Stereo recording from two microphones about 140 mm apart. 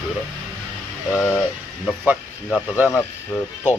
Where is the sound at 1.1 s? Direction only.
20° left (ahead or behind).